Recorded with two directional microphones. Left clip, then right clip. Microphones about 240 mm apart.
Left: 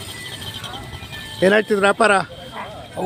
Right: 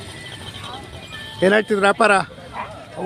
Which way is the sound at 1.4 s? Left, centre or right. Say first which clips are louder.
Even; centre.